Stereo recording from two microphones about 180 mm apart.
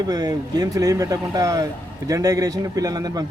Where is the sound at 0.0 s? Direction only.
20° right (ahead or behind).